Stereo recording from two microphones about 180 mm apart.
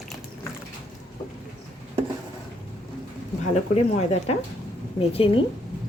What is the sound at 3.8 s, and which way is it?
Speech, 35° left (ahead or behind).